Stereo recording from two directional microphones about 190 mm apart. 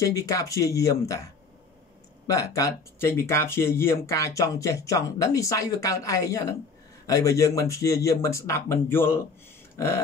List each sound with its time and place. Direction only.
0.0 s speech: 15° left (ahead or behind)
2.2 s speech: 15° left (ahead or behind)